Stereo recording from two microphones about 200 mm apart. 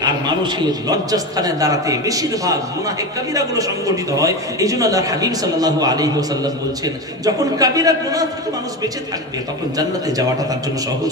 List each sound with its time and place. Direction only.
0.0 s a man's voice: 20° right (ahead or behind)
9.8 s a man's voice: 20° right (ahead or behind)